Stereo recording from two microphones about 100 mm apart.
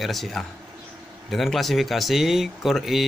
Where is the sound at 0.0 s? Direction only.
Centre (ahead or behind).